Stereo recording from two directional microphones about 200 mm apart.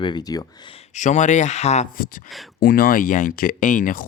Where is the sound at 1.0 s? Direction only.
40° left (ahead or behind).